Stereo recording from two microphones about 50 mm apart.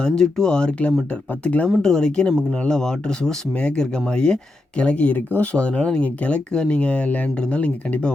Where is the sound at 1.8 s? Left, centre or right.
Centre.